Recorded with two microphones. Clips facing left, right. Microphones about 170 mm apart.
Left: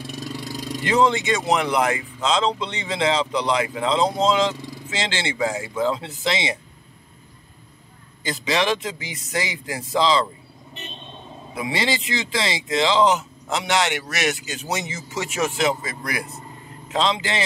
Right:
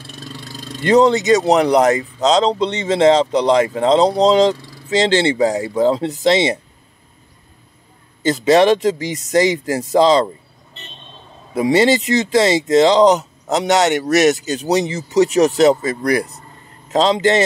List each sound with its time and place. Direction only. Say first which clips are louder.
0.0 s vehicle: left 3 dB; 10° left (ahead or behind)
0.8 s speech: right 8 dB; 40° right (ahead or behind)
8.3 s speech: right 11 dB; 45° right (ahead or behind)
11.5 s speech: right 11 dB; 40° right (ahead or behind)